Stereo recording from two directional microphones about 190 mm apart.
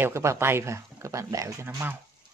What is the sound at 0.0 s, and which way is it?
Speech, 15° right (ahead or behind).